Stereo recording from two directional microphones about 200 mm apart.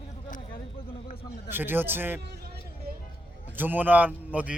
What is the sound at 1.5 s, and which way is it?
Speech, 10° right (ahead or behind).